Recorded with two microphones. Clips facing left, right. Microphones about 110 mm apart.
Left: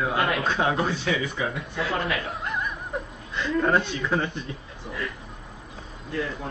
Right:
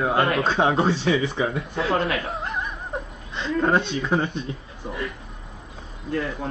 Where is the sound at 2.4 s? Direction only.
25° right (ahead or behind).